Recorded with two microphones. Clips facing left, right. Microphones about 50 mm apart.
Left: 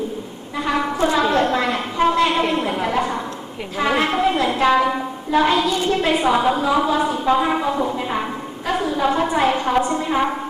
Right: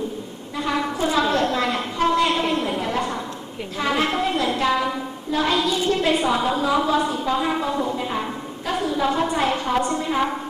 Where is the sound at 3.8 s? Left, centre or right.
Left.